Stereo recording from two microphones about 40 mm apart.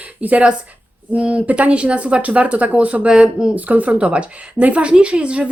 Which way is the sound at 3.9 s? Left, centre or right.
Right.